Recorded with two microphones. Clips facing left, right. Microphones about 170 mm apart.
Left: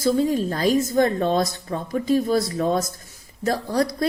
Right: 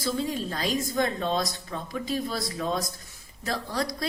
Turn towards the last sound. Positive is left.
turn(degrees=45)  # may be behind; listen again after turning